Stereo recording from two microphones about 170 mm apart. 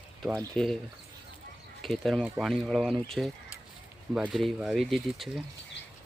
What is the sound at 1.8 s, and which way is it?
Speech, centre (ahead or behind).